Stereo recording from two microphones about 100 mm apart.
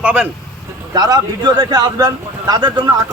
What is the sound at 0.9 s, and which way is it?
Speech, 40° right (ahead or behind).